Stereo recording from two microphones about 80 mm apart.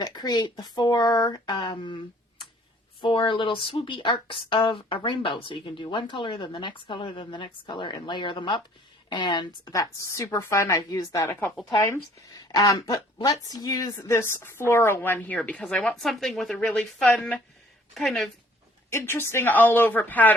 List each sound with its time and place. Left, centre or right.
0.0 s speech: left
3.0 s speech: left
9.6 s speech: left
10.8 s speech: left
11.3 s a woman's voice: left
12.4 s speech: left
14.1 s a woman's voice: left; by 16.6 s centre
16.6 s speech: centre
17.9 s a woman's voice: centre
18.9 s a woman's voice: left